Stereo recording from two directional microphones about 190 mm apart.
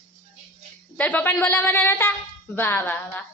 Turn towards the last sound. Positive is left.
turn(degrees=10)  # may be behind; listen again after turning